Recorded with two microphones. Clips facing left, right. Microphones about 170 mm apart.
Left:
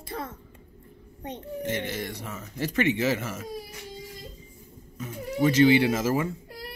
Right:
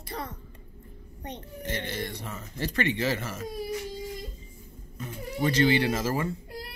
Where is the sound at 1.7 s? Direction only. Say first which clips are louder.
Even; 10° left (ahead or behind).